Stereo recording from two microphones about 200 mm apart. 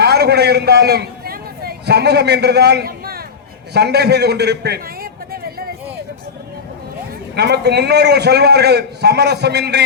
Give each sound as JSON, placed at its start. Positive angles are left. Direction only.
{"t": 0.0, "sound": "a man's voice", "side_deg": -55}
{"t": 5.3, "sound": "a sound", "side_deg": -50}
{"t": 7.3, "sound": "a man's voice", "side_deg": -55}